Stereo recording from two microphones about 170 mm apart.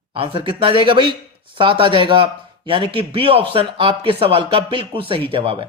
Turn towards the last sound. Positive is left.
turn(degrees=-30)  # may be behind; listen again after turning